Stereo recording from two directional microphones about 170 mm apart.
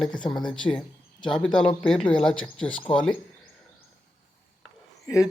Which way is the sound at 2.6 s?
30° left (ahead or behind).